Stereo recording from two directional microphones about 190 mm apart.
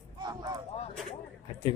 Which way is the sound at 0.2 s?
20° right (ahead or behind).